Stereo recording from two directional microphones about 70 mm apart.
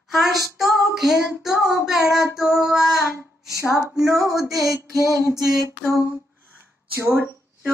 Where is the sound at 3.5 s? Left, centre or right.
Left.